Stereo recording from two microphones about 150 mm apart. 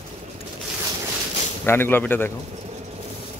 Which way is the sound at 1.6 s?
15° left (ahead or behind).